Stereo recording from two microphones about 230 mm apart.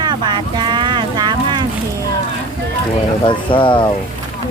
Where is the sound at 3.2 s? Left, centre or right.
Left.